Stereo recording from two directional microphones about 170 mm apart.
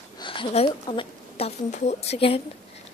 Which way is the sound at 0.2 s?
30° left (ahead or behind).